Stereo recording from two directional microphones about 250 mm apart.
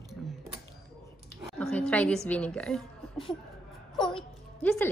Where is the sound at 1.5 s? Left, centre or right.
Centre.